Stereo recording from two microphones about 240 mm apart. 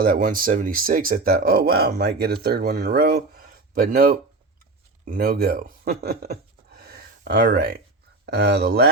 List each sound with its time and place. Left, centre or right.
0.0 s speech: right